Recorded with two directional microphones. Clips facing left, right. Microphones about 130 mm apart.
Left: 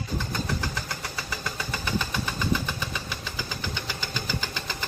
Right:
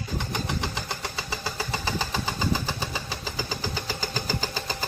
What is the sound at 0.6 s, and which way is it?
Engine, 25° right (ahead or behind).